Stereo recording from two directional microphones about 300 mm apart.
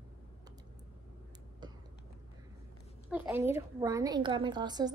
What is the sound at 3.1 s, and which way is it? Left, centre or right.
A woman's voice, centre.